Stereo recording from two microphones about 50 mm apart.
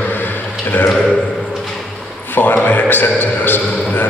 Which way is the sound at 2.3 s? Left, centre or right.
Left.